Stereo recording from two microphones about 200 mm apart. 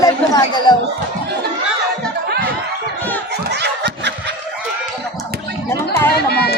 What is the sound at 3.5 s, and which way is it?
Snicker, 55° right (ahead or behind).